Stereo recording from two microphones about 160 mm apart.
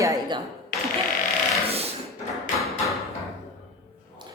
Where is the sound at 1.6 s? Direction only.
40° right (ahead or behind).